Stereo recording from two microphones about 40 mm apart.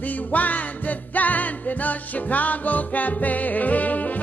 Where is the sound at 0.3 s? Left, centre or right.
Left.